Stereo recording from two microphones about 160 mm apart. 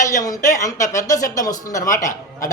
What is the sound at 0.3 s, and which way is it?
A woman's voice, 20° left (ahead or behind).